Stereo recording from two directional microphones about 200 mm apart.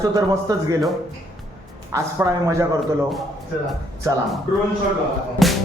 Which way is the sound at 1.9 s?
15° right (ahead or behind).